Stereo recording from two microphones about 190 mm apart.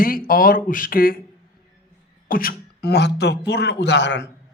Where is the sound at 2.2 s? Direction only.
50° left (ahead or behind).